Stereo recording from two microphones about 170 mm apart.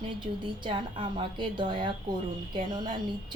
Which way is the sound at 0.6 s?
30° right (ahead or behind).